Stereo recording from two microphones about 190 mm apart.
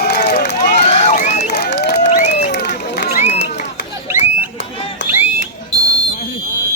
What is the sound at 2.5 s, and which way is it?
Run, 60° left (ahead or behind).